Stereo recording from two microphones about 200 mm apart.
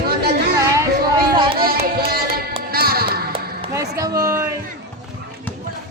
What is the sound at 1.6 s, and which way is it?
Music, 50° right (ahead or behind).